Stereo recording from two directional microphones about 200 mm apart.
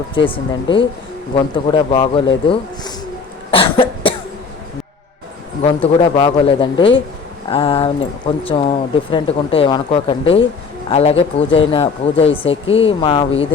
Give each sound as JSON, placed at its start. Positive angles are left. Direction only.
{"t": 0.1, "sound": "speech", "side_deg": 25}
{"t": 3.5, "sound": "cough", "side_deg": 25}
{"t": 5.8, "sound": "speech", "side_deg": 25}